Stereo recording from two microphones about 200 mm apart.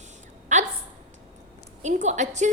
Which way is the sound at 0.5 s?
40° right (ahead or behind).